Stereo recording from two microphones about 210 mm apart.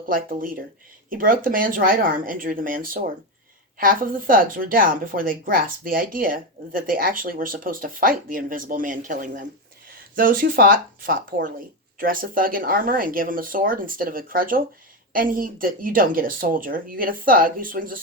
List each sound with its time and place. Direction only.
0.1 s speech: 40° right (ahead or behind)